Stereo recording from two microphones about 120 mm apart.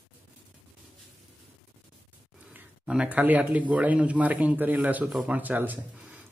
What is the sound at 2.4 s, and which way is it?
Speech, 10° right (ahead or behind).